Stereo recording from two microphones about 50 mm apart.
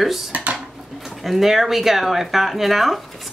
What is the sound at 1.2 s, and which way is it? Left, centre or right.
Speech, centre.